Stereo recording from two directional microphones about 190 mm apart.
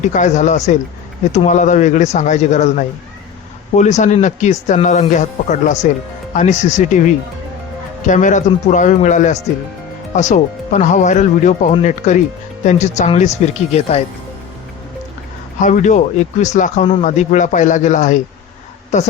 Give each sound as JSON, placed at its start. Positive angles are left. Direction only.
{"t": 0.1, "sound": "speech", "side_deg": 40}
{"t": 15.6, "sound": "speech", "side_deg": 40}